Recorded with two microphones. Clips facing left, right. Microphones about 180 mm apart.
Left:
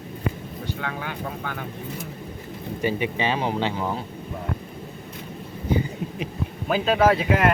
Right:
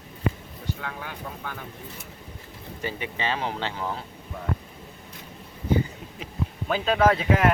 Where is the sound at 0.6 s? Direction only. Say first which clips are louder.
Left 3 dB; 80° left.